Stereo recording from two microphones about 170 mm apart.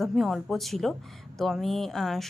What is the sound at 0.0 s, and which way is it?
Speech, centre (ahead or behind).